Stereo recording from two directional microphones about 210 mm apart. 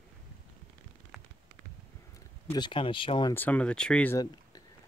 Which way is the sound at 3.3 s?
10° left (ahead or behind).